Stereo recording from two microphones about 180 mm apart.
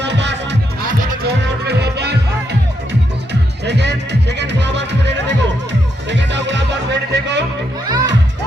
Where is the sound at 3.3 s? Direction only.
70° right (ahead or behind).